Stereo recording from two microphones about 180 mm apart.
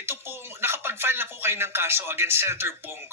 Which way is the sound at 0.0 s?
15° right (ahead or behind).